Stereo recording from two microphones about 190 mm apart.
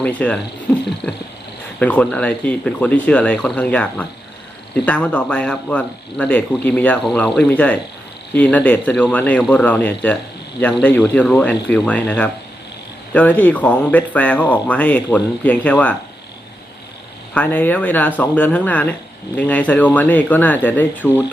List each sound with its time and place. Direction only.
0.0 s speech: 5° left (ahead or behind)
17.3 s speech: 10° left (ahead or behind)